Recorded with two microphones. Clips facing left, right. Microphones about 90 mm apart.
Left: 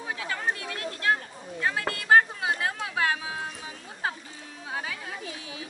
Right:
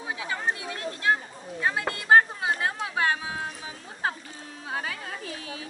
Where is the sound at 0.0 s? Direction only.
15° right (ahead or behind).